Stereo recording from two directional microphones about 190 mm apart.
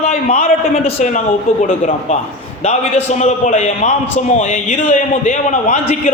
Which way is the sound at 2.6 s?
35° left (ahead or behind).